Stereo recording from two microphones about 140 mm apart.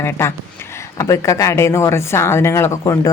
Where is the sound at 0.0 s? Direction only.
20° left (ahead or behind).